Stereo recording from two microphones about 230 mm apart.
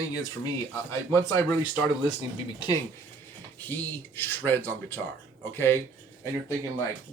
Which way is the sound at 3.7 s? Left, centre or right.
Centre.